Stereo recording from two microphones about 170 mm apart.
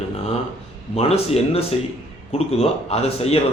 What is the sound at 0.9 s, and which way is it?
A man's voice, 35° left (ahead or behind).